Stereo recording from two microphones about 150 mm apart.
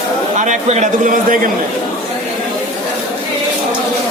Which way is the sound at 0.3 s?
55° right (ahead or behind).